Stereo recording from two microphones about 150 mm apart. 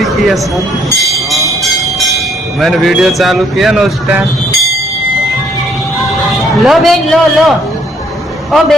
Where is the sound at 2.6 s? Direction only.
Centre (ahead or behind).